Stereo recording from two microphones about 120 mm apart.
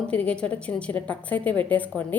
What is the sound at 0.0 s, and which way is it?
A woman's voice, 10° left (ahead or behind).